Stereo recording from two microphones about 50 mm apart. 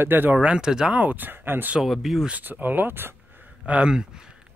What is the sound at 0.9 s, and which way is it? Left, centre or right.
Speech, right.